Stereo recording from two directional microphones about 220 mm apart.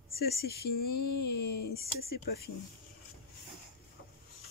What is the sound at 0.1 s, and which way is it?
Speech, 45° left (ahead or behind).